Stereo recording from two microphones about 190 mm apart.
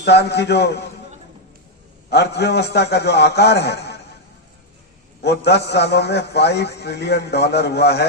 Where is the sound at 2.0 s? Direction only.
60° left (ahead or behind).